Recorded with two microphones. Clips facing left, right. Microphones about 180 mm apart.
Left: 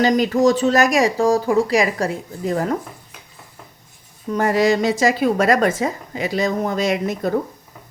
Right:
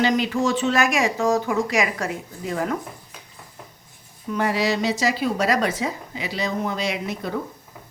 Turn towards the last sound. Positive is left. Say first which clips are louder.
# left 7 dB
turn(degrees=45)  # may be behind; listen again after turning